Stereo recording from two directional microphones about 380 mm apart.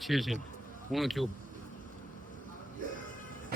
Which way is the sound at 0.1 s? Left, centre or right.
Centre.